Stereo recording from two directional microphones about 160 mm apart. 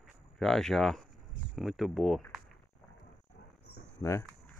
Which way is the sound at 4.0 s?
20° left (ahead or behind).